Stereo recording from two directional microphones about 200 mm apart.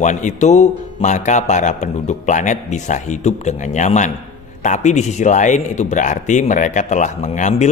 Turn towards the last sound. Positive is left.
turn(degrees=35)  # may be behind; listen again after turning